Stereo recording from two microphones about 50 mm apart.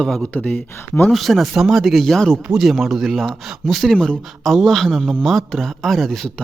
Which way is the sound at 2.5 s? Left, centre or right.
Centre.